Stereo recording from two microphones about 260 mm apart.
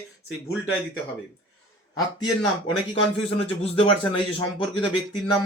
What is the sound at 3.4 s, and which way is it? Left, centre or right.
Speech, left.